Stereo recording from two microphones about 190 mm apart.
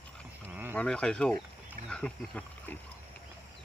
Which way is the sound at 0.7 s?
5° left (ahead or behind).